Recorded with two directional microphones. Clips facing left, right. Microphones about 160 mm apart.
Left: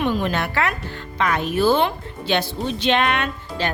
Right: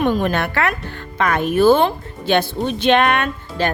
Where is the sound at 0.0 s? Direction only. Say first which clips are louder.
Right 4 dB; 50° right (ahead or behind).